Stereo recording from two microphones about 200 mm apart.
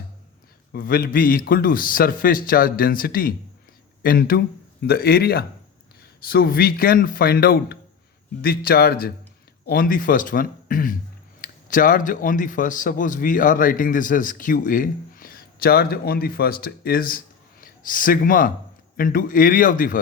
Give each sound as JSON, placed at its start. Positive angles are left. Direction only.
{"t": 0.7, "sound": "a man's voice", "side_deg": 50}